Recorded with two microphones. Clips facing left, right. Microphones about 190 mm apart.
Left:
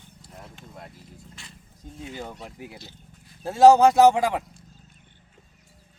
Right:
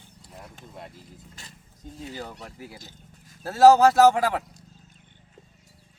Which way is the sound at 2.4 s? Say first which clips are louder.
Left 1 dB; 20° left (ahead or behind).